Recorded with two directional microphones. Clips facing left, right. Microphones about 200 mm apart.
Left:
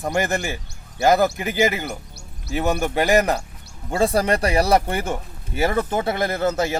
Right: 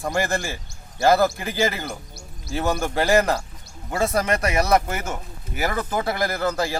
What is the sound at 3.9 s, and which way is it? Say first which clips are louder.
Speech: left 3 dB; 30° left (ahead or behind).